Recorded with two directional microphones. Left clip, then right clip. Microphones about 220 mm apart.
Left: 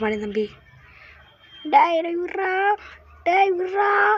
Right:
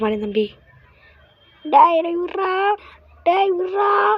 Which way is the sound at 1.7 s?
10° right (ahead or behind).